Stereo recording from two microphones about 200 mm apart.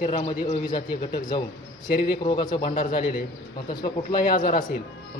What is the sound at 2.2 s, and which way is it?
Speech, 25° left (ahead or behind).